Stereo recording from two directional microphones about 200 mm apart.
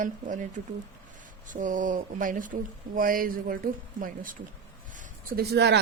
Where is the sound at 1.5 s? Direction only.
40° right (ahead or behind).